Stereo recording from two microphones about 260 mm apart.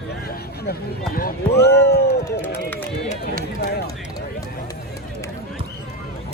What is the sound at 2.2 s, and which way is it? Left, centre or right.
Speech, centre.